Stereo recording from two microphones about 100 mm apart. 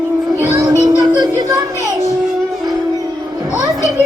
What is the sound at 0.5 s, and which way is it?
Music, 35° right (ahead or behind).